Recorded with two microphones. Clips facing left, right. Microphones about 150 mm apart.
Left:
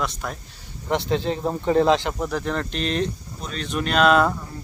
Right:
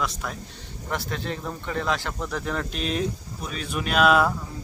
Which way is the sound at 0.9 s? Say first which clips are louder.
Left 7 dB; 25° left (ahead or behind).